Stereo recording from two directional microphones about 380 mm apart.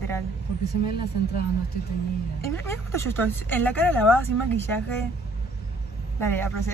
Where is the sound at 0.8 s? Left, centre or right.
Left.